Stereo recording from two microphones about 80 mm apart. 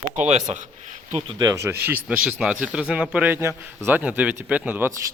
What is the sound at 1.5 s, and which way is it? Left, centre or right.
Speech, right.